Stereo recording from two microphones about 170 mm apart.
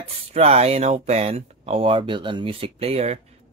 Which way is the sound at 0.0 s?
40° right (ahead or behind).